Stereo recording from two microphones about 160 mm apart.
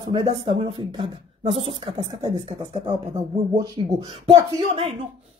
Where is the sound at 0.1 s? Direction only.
35° right (ahead or behind).